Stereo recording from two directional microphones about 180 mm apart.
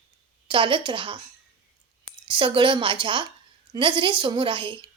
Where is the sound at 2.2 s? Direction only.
25° right (ahead or behind).